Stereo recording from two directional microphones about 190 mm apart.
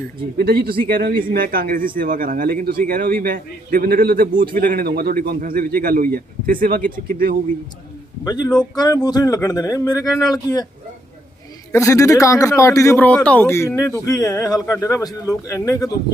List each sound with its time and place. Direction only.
0.3 s a man's voice: 50° right (ahead or behind)
8.7 s speech: 20° left (ahead or behind)
11.7 s a man's voice: 15° left (ahead or behind)